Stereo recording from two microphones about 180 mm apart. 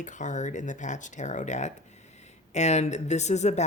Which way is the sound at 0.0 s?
45° left (ahead or behind).